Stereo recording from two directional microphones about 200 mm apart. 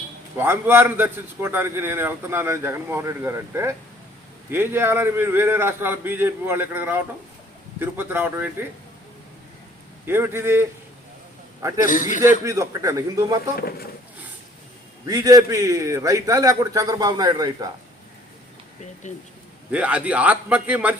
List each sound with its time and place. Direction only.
0.3 s a man's voice: 10° right (ahead or behind)
10.1 s a man's voice: 10° right (ahead or behind)
11.9 s a man's voice: 40° left (ahead or behind)
12.5 s a man's voice: 15° right (ahead or behind)
13.6 s speech: 50° left (ahead or behind)
15.0 s a man's voice: 20° right (ahead or behind)
19.0 s a man's voice: 35° left (ahead or behind)
19.7 s a man's voice: 5° right (ahead or behind)